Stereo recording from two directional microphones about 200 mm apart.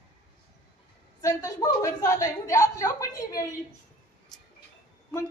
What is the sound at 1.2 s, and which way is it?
Speech, 15° left (ahead or behind).